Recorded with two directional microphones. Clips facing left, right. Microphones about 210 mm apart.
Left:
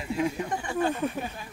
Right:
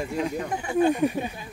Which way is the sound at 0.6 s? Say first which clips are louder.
Right 7 dB; 15° right (ahead or behind).